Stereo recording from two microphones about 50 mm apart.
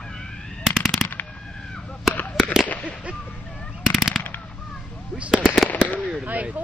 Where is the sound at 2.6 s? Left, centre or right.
Left.